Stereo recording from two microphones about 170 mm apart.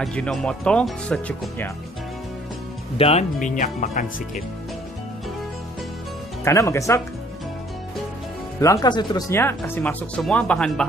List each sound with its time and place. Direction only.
0.0 s speech: 5° left (ahead or behind)
3.0 s speech: 35° left (ahead or behind)
3.3 s speech: 50° left (ahead or behind)
6.4 s speech: 15° left (ahead or behind)
8.5 s speech: 20° left (ahead or behind)
9.3 s speech: 15° left (ahead or behind)